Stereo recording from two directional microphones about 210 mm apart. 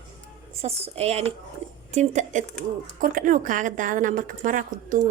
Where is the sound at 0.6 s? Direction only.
30° right (ahead or behind).